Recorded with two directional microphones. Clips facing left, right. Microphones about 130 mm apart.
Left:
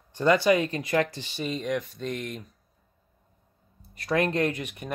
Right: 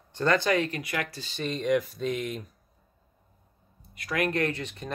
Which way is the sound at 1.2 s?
15° left (ahead or behind).